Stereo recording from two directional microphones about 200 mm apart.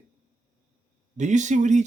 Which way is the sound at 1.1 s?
35° right (ahead or behind).